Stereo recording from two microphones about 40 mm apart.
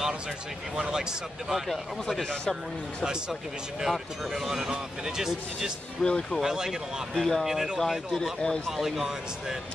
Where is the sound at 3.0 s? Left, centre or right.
Centre.